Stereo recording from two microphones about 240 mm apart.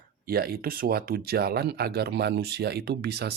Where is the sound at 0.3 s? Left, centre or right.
Right.